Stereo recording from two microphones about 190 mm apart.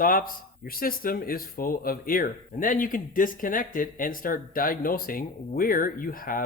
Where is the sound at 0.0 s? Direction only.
50° left (ahead or behind).